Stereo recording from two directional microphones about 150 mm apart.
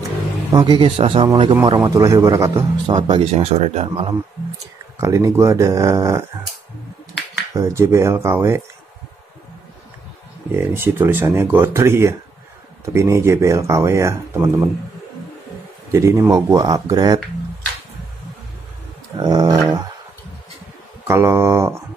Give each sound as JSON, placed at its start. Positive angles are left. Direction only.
{"t": 0.5, "sound": "a man's voice", "side_deg": -30}
{"t": 5.0, "sound": "speech", "side_deg": -20}
{"t": 7.5, "sound": "speech", "side_deg": -20}
{"t": 10.5, "sound": "speech", "side_deg": -15}
{"t": 15.9, "sound": "speech", "side_deg": -20}
{"t": 19.1, "sound": "speech", "side_deg": -25}
{"t": 21.1, "sound": "speech", "side_deg": -15}